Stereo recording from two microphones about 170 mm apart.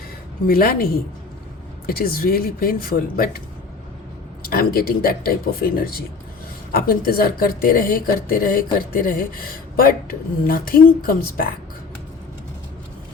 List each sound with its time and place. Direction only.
0.4 s speech: 60° left (ahead or behind)
1.9 s speech: 60° left (ahead or behind)
4.4 s speech: 65° left (ahead or behind)